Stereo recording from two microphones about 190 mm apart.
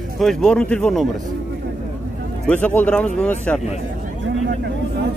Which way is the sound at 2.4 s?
10° left (ahead or behind).